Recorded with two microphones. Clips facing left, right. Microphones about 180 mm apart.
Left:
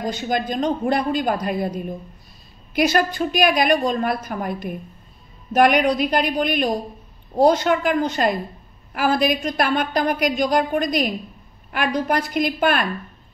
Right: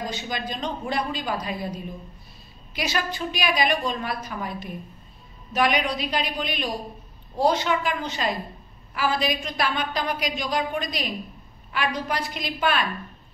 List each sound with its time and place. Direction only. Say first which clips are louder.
0.1 s a woman's voice: left 8 dB; 50° left (ahead or behind)